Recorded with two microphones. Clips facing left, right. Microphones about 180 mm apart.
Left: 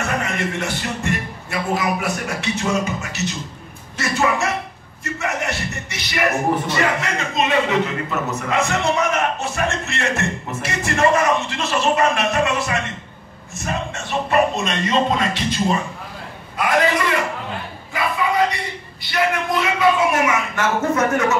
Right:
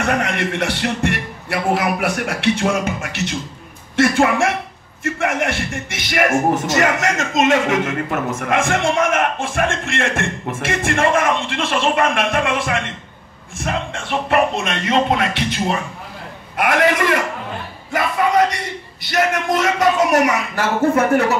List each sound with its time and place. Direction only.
0.0 s a man's voice: 65° right (ahead or behind)
19.0 s speech: 45° right (ahead or behind)